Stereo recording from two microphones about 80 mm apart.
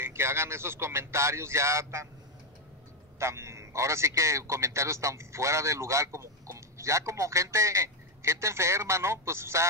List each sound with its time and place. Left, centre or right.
0.0 s a man's voice: right
3.2 s a man's voice: right